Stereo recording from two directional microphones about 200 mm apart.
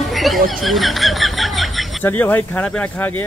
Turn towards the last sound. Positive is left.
turn(degrees=10)  # may be behind; listen again after turning